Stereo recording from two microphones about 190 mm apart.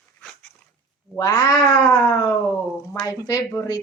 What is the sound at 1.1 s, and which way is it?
Speech, 20° left (ahead or behind).